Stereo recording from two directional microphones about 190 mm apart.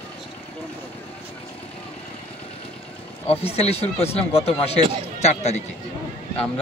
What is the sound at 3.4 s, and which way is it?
Speech, 30° left (ahead or behind).